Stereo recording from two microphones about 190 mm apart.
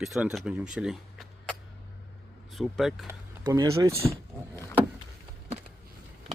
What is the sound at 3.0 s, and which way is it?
Speech, 15° right (ahead or behind).